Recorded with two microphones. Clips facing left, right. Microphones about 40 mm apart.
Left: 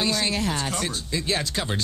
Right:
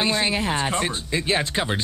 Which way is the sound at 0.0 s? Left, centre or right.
Right.